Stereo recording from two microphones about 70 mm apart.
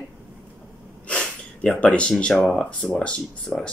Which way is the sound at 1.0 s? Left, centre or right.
Centre.